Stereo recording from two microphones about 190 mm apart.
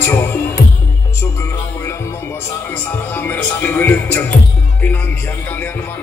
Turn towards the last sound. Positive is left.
turn(degrees=10)  # may be behind; listen again after turning